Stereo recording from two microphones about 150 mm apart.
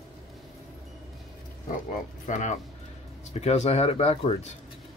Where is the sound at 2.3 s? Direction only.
50° left (ahead or behind).